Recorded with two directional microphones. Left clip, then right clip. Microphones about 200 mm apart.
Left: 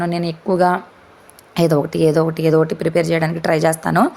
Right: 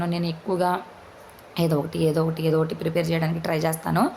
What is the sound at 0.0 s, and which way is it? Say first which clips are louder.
A woman's voice: left 7 dB; 35° left (ahead or behind).